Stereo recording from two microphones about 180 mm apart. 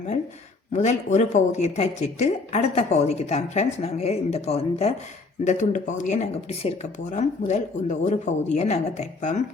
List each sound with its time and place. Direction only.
0.7 s speech: 40° left (ahead or behind)